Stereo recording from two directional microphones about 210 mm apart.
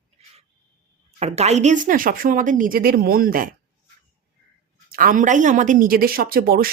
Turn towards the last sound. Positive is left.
turn(degrees=-45)  # may be behind; listen again after turning